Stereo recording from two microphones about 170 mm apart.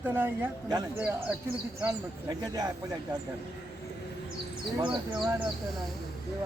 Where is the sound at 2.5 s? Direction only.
20° right (ahead or behind).